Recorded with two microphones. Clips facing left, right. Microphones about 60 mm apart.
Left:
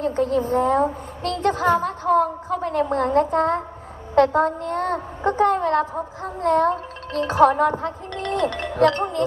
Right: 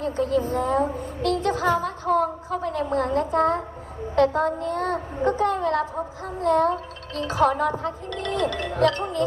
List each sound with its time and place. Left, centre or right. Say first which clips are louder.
0.0 s a woman's voice: left 2 dB; left